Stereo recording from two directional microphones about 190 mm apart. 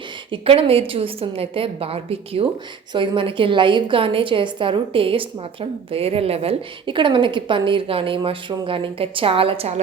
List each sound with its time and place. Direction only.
0.3 s a woman's voice: 30° right (ahead or behind)